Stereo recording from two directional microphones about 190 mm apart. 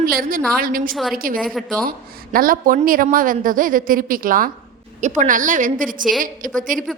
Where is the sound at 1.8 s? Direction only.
50° right (ahead or behind).